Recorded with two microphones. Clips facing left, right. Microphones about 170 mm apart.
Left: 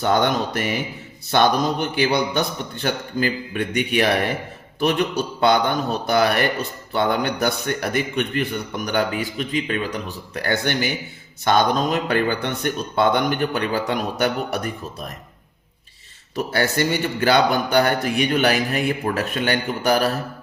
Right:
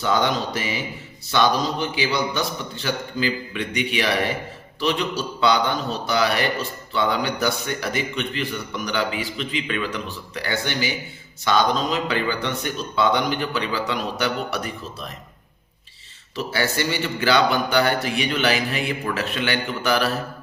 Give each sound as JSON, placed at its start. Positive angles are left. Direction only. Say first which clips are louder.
{"t": 0.0, "sound": "a man's voice", "louder": "left 2 dB", "side_deg": 55}
{"t": 16.3, "sound": "a man's voice", "louder": "left 3 dB", "side_deg": 50}